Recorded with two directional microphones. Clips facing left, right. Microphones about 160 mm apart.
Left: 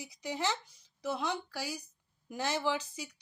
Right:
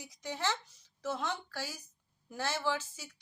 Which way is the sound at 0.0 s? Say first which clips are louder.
Left 2 dB; 10° left (ahead or behind).